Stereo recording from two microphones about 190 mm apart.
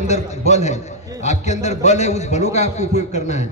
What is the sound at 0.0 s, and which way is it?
A man's voice, 35° left (ahead or behind).